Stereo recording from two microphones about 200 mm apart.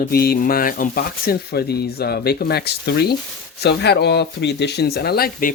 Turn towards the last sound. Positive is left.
turn(degrees=50)  # may be behind; listen again after turning